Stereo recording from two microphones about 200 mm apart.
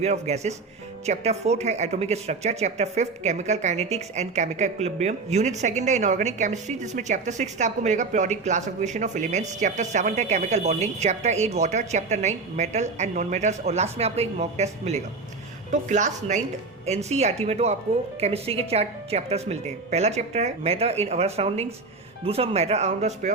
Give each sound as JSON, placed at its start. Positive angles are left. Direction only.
{"t": 0.0, "sound": "speech", "side_deg": -35}